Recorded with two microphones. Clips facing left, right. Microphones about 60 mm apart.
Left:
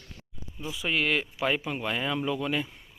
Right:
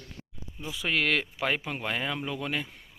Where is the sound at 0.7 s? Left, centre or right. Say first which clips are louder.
Even; right.